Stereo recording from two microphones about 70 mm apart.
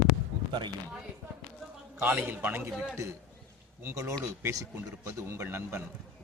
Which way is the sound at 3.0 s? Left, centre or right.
Right.